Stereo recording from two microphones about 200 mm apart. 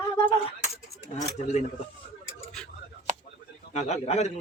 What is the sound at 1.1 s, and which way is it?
Speech, 35° left (ahead or behind).